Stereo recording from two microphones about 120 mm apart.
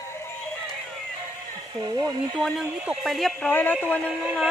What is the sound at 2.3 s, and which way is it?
Speech, 10° left (ahead or behind).